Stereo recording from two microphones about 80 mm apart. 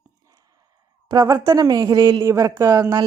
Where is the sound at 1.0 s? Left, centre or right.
Right.